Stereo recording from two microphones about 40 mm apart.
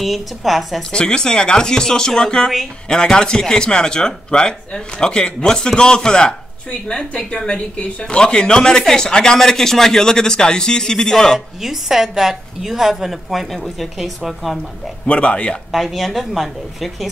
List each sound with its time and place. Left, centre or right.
0.0 s a woman's voice: centre
0.9 s a man's voice: centre
11.3 s a woman's voice: centre
15.0 s a man's voice: left
15.7 s a woman's voice: centre